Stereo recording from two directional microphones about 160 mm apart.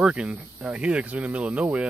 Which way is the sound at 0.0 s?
5° right (ahead or behind).